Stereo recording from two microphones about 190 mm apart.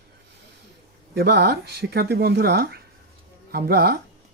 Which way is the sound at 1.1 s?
60° right (ahead or behind).